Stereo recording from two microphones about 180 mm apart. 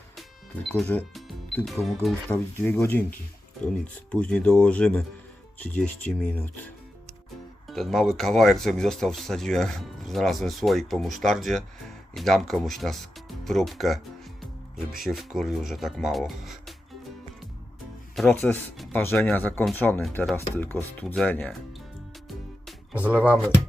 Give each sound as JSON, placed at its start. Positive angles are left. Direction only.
{"t": 0.7, "sound": "speech", "side_deg": 10}
{"t": 2.6, "sound": "speech", "side_deg": 10}
{"t": 7.7, "sound": "speech", "side_deg": 0}
{"t": 15.0, "sound": "speech", "side_deg": 0}
{"t": 18.1, "sound": "speech", "side_deg": 5}
{"t": 23.0, "sound": "speech", "side_deg": -10}